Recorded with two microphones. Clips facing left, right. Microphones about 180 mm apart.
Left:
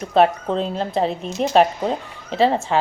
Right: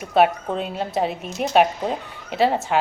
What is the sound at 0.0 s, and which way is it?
A woman's voice, 5° right (ahead or behind).